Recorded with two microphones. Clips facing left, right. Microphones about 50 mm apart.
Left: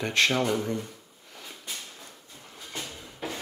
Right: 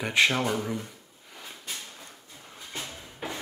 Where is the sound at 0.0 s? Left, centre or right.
Centre.